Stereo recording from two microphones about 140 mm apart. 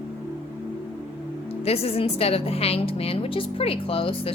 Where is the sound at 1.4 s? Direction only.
45° left (ahead or behind).